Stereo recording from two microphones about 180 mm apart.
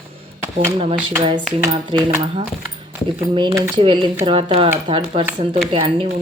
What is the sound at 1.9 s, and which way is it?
Speech, 25° right (ahead or behind).